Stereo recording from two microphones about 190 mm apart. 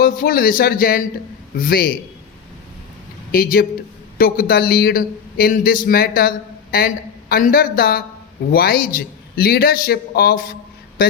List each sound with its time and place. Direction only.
0.0 s a man's voice: 50° left (ahead or behind)
3.3 s a man's voice: 50° left (ahead or behind)